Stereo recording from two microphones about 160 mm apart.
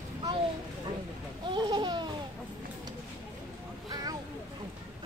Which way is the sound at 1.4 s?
30° right (ahead or behind).